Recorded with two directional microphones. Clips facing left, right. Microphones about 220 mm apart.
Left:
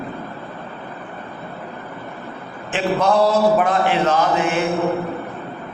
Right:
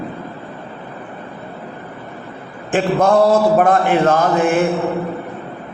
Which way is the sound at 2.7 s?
50° right (ahead or behind).